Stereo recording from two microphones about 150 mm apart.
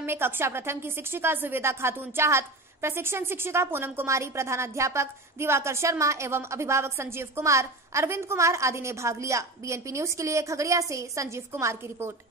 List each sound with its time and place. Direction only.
0.0 s a woman's voice: 15° right (ahead or behind)